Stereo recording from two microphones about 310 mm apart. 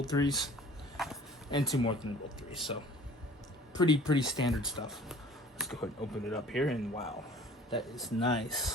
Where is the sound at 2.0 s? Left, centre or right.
Left.